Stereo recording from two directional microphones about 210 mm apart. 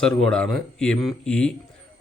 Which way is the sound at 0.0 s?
5° left (ahead or behind).